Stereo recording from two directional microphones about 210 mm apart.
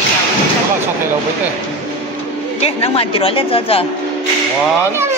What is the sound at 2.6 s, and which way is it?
A woman's voice, 25° left (ahead or behind).